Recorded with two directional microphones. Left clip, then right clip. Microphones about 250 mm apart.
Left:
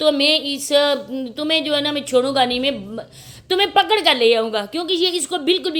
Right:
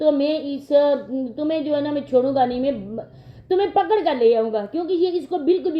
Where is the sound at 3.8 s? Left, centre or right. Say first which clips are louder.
Left 4 dB; centre.